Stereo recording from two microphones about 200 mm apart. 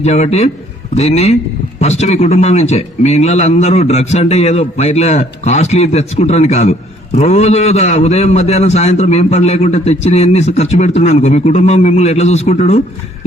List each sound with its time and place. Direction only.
0.0 s a man's voice: 30° left (ahead or behind)